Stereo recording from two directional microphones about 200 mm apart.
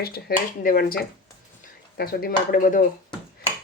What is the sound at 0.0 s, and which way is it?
Speech, 50° left (ahead or behind).